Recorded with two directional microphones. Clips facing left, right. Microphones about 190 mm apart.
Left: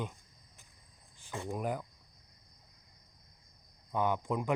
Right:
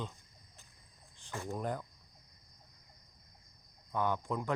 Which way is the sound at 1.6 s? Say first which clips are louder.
Left 2 dB; 10° left (ahead or behind).